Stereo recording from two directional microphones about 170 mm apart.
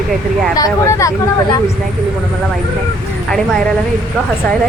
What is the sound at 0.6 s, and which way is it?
Speech, 20° left (ahead or behind).